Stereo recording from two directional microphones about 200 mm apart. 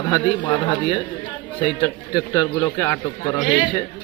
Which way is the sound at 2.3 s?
15° left (ahead or behind).